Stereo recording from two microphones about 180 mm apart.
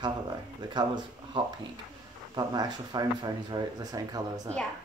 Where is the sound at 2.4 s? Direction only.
20° right (ahead or behind).